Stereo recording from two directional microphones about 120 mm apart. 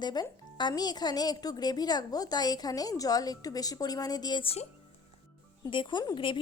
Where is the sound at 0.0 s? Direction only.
35° left (ahead or behind).